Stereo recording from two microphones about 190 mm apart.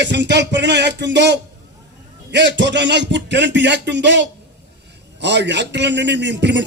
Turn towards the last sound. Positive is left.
turn(degrees=-65)  # may be behind; listen again after turning